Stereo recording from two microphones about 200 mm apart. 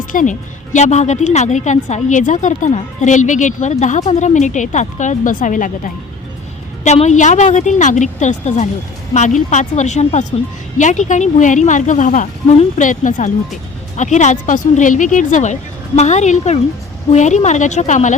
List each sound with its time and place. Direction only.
0.1 s a woman's voice: 40° left (ahead or behind)